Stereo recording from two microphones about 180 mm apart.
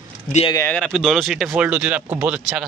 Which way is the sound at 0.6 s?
5° left (ahead or behind).